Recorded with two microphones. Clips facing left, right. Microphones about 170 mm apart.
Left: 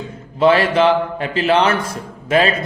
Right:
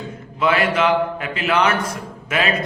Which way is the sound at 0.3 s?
30° left (ahead or behind).